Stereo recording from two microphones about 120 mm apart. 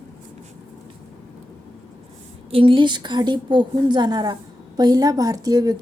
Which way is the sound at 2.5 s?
45° right (ahead or behind).